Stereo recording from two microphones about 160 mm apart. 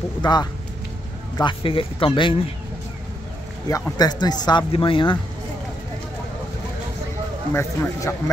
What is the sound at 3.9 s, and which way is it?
Speech, 25° left (ahead or behind).